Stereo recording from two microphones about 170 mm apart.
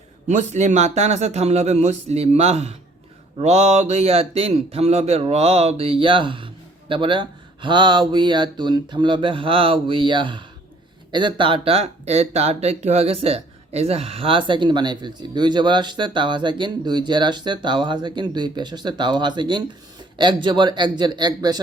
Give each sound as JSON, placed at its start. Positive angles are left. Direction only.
{"t": 0.3, "sound": "speech", "side_deg": -45}